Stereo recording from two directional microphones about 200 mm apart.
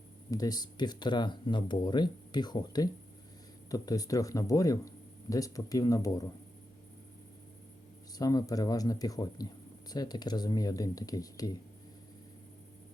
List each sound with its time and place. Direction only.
0.3 s speech: 20° left (ahead or behind)
8.2 s speech: 15° left (ahead or behind)